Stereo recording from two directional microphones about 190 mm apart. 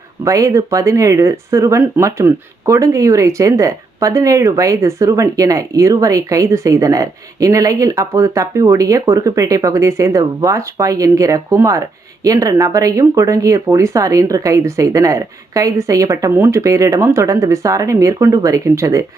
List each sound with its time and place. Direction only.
0.3 s speech: 15° right (ahead or behind)